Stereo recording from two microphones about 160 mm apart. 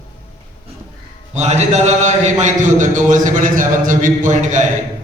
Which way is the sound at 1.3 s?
45° right (ahead or behind).